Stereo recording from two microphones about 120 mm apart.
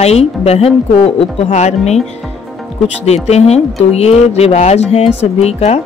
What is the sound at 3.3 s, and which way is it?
Speech, 65° left (ahead or behind).